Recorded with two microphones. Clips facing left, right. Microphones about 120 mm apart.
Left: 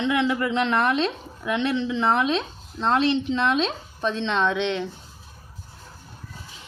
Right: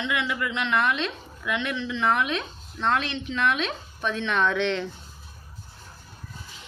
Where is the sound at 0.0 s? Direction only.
35° left (ahead or behind); by 4.9 s 20° left (ahead or behind).